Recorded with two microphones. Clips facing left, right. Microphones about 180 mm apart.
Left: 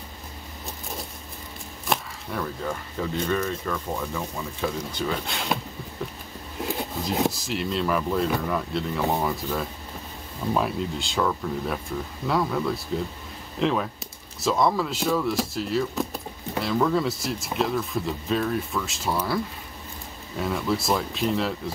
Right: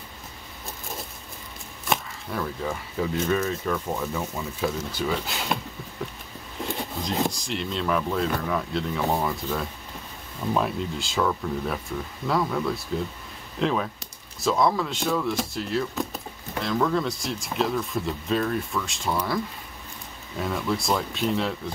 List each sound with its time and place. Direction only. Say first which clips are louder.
1.9 s speech: even; centre (ahead or behind)
6.6 s speech: left 1 dB; 5° left (ahead or behind)